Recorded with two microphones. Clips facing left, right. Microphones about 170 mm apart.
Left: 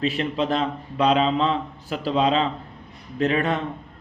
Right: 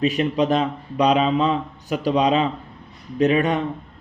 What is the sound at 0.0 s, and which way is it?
Speech, 20° right (ahead or behind).